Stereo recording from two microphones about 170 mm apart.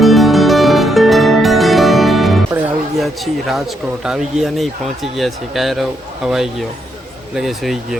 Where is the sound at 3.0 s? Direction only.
Centre (ahead or behind).